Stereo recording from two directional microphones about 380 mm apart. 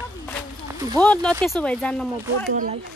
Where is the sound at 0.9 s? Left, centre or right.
Centre.